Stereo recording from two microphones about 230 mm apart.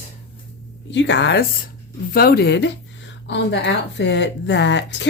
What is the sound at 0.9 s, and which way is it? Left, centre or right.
A woman's voice, left.